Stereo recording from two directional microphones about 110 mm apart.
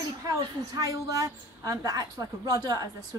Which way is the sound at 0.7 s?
30° right (ahead or behind).